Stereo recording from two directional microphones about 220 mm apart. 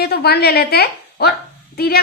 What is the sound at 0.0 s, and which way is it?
A woman's voice, 45° left (ahead or behind).